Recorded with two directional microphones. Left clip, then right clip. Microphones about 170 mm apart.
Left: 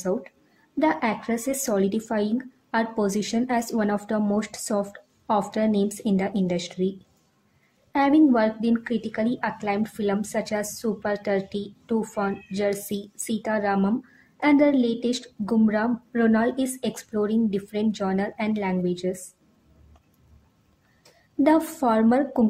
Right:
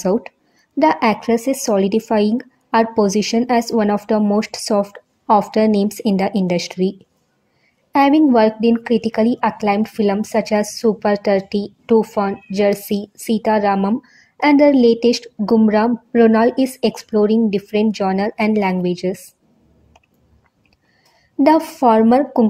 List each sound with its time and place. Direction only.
0.0 s a woman's voice: 30° right (ahead or behind)
7.9 s a woman's voice: 30° right (ahead or behind)
21.5 s a woman's voice: 30° right (ahead or behind)